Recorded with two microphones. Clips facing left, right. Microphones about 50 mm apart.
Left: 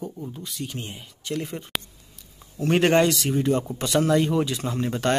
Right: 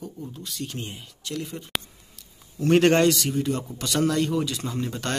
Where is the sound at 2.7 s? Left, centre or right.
Centre.